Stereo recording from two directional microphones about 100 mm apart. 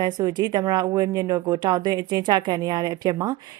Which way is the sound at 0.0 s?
40° right (ahead or behind).